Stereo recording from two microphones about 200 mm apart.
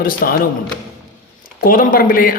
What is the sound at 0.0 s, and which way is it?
Speech, 45° left (ahead or behind).